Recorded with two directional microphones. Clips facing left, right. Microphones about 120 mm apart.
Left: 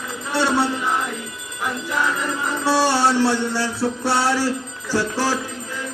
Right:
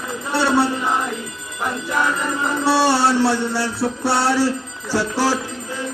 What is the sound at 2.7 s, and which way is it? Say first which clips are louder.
Music: right 1 dB; 10° right (ahead or behind).